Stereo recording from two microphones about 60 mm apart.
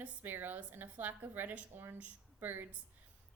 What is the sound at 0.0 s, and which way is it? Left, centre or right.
A woman's voice, right.